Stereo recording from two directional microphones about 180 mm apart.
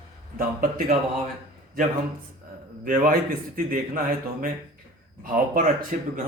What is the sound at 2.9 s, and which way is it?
Speech, 50° right (ahead or behind).